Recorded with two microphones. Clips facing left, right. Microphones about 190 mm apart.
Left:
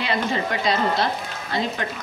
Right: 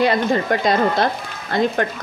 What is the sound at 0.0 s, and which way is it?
Speech, 45° right (ahead or behind).